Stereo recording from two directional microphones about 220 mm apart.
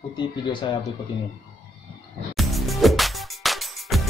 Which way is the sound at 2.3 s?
Centre (ahead or behind).